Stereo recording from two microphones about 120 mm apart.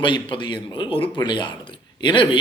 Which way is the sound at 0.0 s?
45° left (ahead or behind).